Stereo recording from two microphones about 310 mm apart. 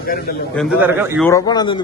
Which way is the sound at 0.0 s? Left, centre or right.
Left.